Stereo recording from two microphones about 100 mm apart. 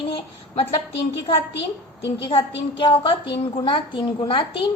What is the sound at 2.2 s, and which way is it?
A woman's voice, 60° left (ahead or behind).